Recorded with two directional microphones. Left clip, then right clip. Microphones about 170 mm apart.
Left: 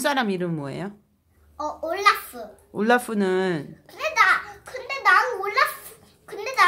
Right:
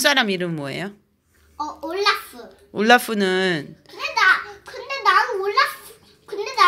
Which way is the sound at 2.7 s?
5° right (ahead or behind).